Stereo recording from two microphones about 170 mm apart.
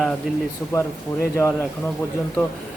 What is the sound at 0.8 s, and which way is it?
Speech, 15° left (ahead or behind).